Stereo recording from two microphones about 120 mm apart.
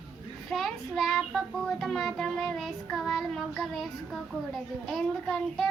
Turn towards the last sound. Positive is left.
turn(degrees=0)  # may be behind; listen again after turning